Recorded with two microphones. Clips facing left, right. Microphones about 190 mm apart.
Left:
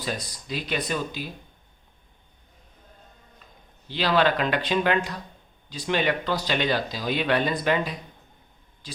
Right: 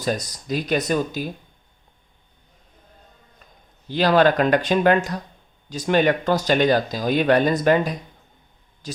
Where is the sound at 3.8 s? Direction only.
45° right (ahead or behind).